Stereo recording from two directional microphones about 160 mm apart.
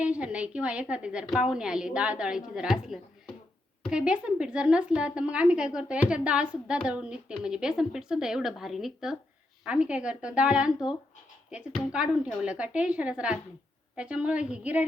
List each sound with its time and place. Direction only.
0.0 s a woman's voice: 5° right (ahead or behind)